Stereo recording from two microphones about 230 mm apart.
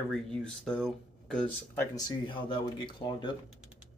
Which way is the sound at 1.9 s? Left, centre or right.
Centre.